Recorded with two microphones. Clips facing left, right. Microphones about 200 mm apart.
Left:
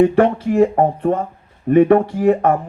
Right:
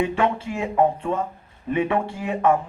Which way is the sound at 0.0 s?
55° left (ahead or behind).